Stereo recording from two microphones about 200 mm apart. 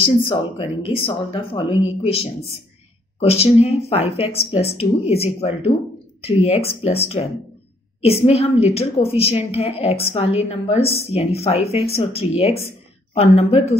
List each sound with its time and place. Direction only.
0.3 s a woman's voice: 25° left (ahead or behind)